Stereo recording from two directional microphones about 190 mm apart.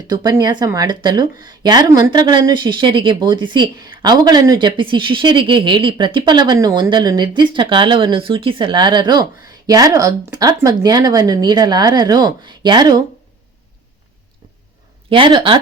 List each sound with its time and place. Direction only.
0.1 s speech: 20° right (ahead or behind)
15.1 s speech: 25° right (ahead or behind)